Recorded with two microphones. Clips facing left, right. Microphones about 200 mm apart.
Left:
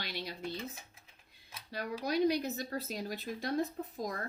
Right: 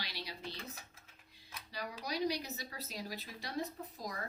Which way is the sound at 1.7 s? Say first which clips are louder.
Left 7 dB; 55° left (ahead or behind).